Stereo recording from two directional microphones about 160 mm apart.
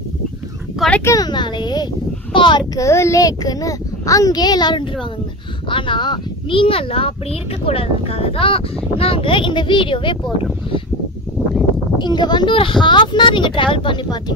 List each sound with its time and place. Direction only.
0.7 s a sound: 5° left (ahead or behind)
1.0 s a child's voice: 25° left (ahead or behind)
2.7 s a child's voice: 20° left (ahead or behind)
12.0 s a child's voice: 25° left (ahead or behind)